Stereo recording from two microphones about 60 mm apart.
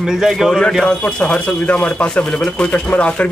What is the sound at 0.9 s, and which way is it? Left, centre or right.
Speech, centre.